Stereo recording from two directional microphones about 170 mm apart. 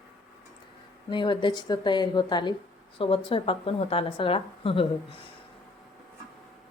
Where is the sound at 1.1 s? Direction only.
25° left (ahead or behind).